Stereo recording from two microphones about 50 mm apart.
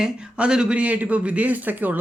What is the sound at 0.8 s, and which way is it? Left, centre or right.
Speech, right.